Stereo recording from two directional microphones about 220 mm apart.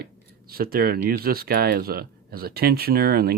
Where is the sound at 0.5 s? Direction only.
45° right (ahead or behind).